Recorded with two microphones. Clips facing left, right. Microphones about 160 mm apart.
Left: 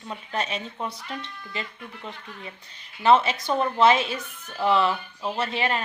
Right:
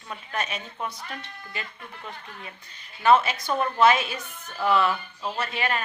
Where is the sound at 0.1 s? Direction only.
25° left (ahead or behind).